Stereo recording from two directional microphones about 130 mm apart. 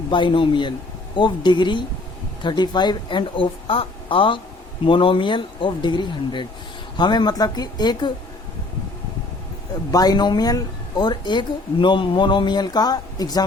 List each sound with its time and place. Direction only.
0.1 s a woman's voice: 40° left (ahead or behind)
9.9 s a woman's voice: 30° left (ahead or behind)